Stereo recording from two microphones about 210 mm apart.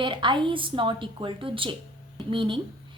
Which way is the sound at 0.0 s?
25° right (ahead or behind).